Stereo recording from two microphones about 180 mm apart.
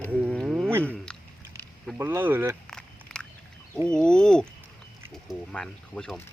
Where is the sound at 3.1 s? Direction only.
5° left (ahead or behind).